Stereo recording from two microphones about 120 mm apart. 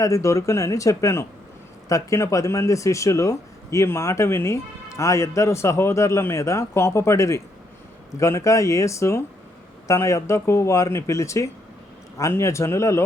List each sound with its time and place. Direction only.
0.0 s speech: 25° left (ahead or behind)